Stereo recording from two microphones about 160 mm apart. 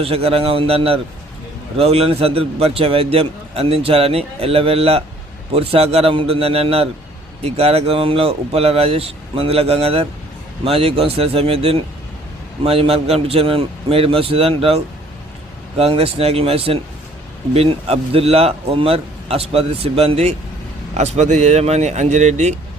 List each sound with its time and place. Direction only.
0.0 s a man's voice: 40° right (ahead or behind)
15.8 s a man's voice: 40° right (ahead or behind)